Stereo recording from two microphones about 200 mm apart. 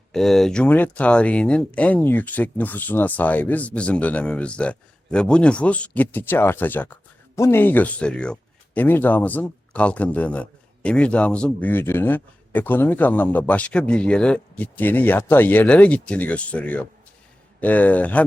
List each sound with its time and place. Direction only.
0.1 s speech: centre (ahead or behind)